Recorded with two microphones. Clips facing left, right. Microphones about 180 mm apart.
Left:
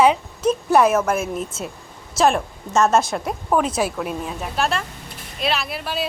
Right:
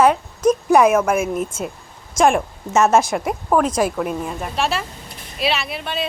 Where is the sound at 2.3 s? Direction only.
20° right (ahead or behind).